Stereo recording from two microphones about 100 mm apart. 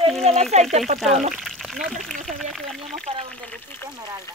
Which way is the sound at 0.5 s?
90° right.